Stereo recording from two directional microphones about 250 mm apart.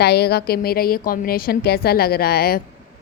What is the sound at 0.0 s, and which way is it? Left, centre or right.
A woman's voice, left.